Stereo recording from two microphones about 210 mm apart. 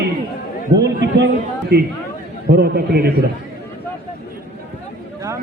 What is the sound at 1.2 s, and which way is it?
Speech, 50° right (ahead or behind).